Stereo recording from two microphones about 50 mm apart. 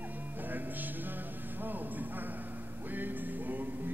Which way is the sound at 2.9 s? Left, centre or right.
Right.